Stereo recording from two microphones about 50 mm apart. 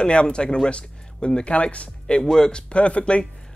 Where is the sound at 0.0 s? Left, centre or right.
Centre.